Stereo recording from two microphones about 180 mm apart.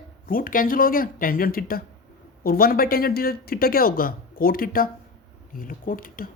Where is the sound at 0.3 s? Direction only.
50° left (ahead or behind).